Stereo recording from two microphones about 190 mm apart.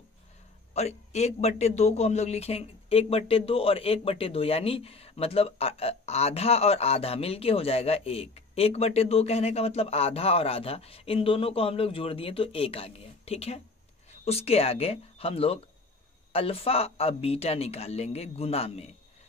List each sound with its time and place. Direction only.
0.7 s a man's voice: 35° left (ahead or behind)